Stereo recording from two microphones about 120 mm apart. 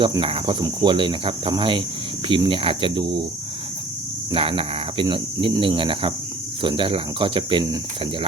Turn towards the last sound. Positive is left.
turn(degrees=-45)  # may be behind; listen again after turning